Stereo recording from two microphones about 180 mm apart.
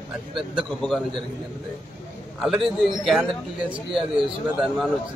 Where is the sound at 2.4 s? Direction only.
Centre (ahead or behind).